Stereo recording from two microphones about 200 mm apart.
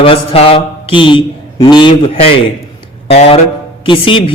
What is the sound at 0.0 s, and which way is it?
A man's voice, 30° left (ahead or behind).